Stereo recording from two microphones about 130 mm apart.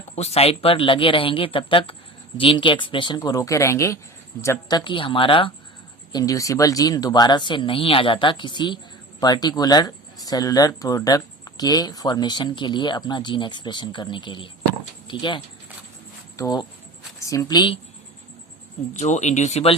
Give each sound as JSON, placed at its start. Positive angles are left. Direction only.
{"t": 0.2, "sound": "speech", "side_deg": 50}
{"t": 3.2, "sound": "speech", "side_deg": 25}
{"t": 4.8, "sound": "speech", "side_deg": 40}
{"t": 6.1, "sound": "speech", "side_deg": 25}
{"t": 16.4, "sound": "speech", "side_deg": 35}
{"t": 18.9, "sound": "speech", "side_deg": 65}